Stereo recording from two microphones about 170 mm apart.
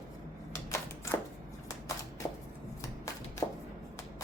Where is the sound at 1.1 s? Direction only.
10° left (ahead or behind).